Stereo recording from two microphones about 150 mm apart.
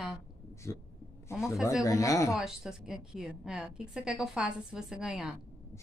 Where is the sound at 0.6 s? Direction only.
20° left (ahead or behind).